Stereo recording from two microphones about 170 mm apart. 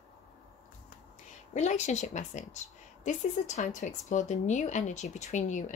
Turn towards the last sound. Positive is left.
turn(degrees=45)  # may be behind; listen again after turning